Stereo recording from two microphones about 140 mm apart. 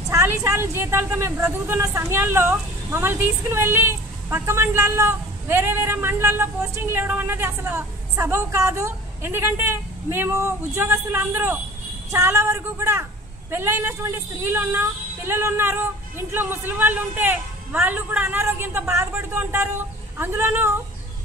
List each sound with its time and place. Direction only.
0.1 s a woman's voice: 20° right (ahead or behind)